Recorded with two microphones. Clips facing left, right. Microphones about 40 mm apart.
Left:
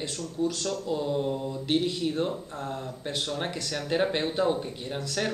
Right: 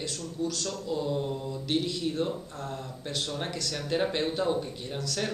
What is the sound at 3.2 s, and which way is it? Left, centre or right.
Speech, centre.